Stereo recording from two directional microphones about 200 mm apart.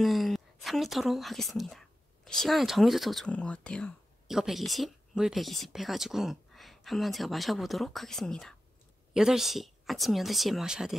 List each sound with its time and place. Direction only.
0.0 s speech: centre (ahead or behind)